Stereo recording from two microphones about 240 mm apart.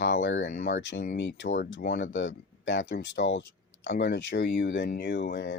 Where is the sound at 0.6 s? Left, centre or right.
Left.